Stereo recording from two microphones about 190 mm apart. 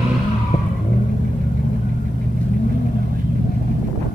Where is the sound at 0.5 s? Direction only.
30° left (ahead or behind).